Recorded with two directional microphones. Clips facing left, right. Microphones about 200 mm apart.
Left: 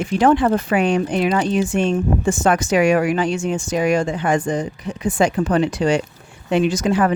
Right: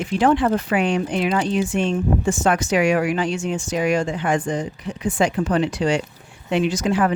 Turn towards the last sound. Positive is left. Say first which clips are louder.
# left 2 dB
turn(degrees=45)  # may be behind; listen again after turning